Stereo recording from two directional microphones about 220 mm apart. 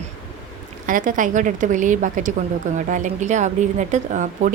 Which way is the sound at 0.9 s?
35° right (ahead or behind).